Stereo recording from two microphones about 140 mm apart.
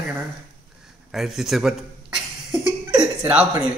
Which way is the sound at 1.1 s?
Centre (ahead or behind).